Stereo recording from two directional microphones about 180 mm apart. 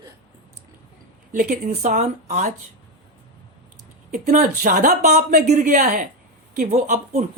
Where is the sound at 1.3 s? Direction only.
50° right (ahead or behind).